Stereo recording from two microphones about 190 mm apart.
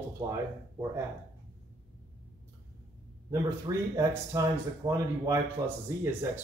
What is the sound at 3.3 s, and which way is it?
Speech, 15° right (ahead or behind).